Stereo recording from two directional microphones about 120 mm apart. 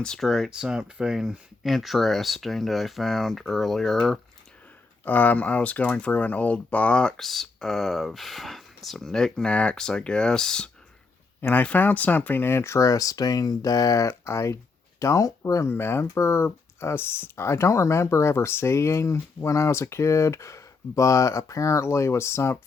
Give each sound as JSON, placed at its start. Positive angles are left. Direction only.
{"t": 0.0, "sound": "speech", "side_deg": 5}
{"t": 5.0, "sound": "speech", "side_deg": 15}